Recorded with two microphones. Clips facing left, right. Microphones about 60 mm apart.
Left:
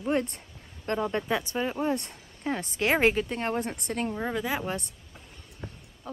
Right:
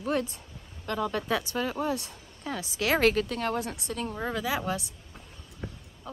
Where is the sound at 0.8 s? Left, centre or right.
Left.